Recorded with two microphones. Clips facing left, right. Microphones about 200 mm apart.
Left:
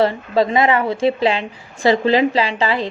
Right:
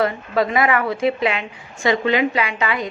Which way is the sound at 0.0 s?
30° left (ahead or behind).